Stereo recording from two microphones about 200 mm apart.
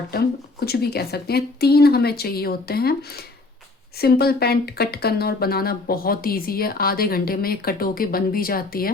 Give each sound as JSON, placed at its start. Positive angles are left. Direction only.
{"t": 0.1, "sound": "speech", "side_deg": 50}
{"t": 4.0, "sound": "speech", "side_deg": 50}